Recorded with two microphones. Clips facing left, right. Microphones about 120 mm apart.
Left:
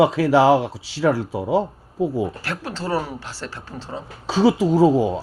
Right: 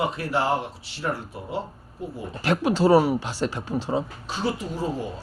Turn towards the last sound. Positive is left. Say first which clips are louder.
# left 13 dB
turn(degrees=90)